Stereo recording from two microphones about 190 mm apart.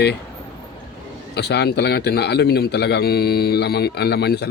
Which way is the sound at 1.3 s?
60° left (ahead or behind).